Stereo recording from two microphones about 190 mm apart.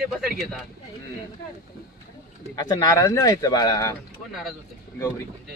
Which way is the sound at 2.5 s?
20° left (ahead or behind).